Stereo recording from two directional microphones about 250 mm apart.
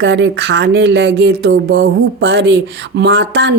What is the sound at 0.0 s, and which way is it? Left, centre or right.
Speech, right.